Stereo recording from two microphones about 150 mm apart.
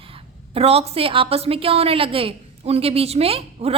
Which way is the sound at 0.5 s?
40° right (ahead or behind).